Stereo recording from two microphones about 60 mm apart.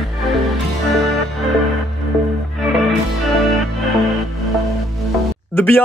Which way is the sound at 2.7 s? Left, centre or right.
Centre.